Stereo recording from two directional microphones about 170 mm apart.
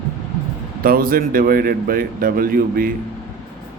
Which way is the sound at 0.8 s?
60° right (ahead or behind).